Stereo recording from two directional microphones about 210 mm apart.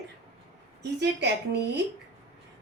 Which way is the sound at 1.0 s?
55° right (ahead or behind).